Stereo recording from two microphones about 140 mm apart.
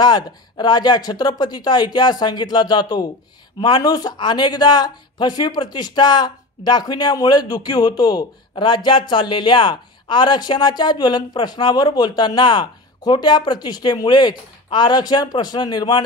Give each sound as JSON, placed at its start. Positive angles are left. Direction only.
{"t": 0.0, "sound": "speech", "side_deg": 30}